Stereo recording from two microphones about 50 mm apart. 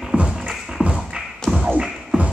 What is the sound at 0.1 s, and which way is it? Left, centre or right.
Music, right.